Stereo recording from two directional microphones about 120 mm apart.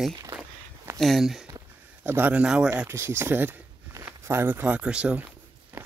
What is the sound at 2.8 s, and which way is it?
Speech, 20° right (ahead or behind).